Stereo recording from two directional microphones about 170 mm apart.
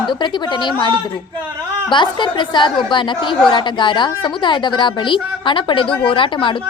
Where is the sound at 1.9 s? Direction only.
25° left (ahead or behind).